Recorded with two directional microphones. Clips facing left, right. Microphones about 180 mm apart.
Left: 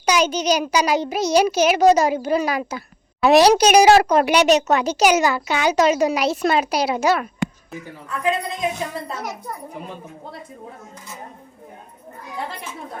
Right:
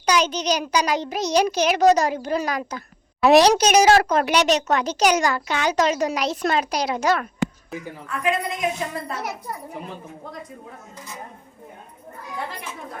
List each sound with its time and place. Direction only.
0.0 s speech: 10° left (ahead or behind)
3.4 s speech: 10° left (ahead or behind)
8.2 s a woman's voice: 30° left (ahead or behind)